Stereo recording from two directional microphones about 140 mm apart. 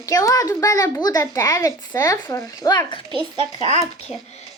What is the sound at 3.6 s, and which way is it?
Speech, 45° left (ahead or behind).